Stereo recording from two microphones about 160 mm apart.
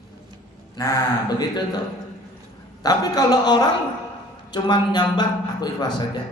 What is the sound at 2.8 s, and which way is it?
A man's voice, 25° left (ahead or behind).